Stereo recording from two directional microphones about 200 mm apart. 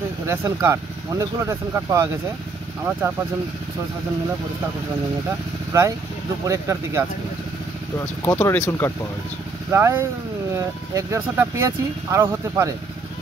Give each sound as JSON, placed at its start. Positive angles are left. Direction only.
{"t": 0.3, "sound": "speech", "side_deg": -15}
{"t": 5.7, "sound": "speech", "side_deg": -15}
{"t": 8.3, "sound": "speech", "side_deg": 10}
{"t": 9.7, "sound": "speech", "side_deg": -10}